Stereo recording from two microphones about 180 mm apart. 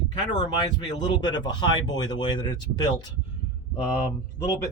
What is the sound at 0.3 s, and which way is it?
Speech, 25° left (ahead or behind).